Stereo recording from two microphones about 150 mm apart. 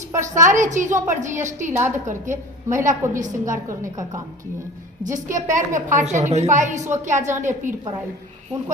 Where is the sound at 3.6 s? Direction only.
20° right (ahead or behind).